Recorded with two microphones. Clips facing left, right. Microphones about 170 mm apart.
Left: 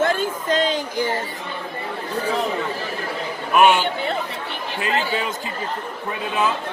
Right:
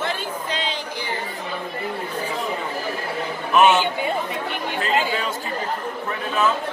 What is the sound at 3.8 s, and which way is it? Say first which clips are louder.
Chatter: even; 15° right (ahead or behind).